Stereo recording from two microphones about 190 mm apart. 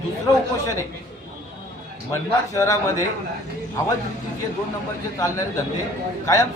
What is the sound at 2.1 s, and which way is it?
Speech, 15° left (ahead or behind).